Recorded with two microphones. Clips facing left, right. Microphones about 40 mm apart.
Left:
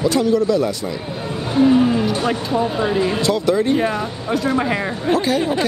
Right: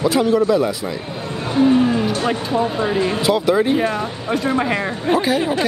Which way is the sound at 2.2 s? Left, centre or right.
Centre.